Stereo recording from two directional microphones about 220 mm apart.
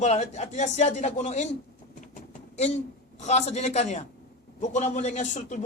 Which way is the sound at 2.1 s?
30° left (ahead or behind).